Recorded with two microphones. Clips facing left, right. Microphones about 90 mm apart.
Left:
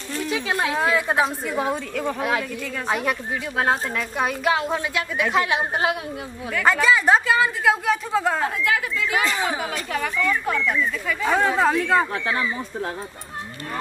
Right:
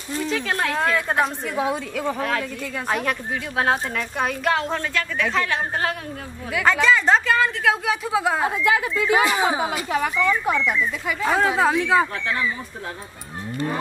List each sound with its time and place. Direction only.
0.2 s a woman's voice: 5° left (ahead or behind)
6.5 s a woman's voice: 5° left (ahead or behind)
8.5 s speech: 25° right (ahead or behind)
11.2 s a woman's voice: 5° right (ahead or behind)